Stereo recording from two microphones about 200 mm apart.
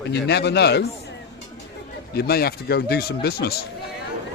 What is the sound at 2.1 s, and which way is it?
Speech, 50° left (ahead or behind).